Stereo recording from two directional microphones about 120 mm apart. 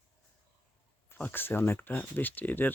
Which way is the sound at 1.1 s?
15° left (ahead or behind).